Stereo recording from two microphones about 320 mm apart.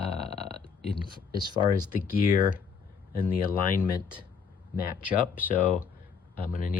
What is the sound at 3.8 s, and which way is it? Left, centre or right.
Speech, centre.